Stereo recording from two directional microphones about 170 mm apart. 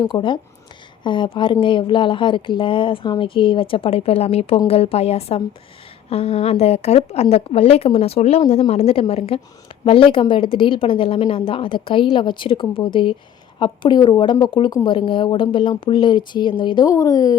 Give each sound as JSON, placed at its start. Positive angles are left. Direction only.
{"t": 0.0, "sound": "a woman's voice", "side_deg": 30}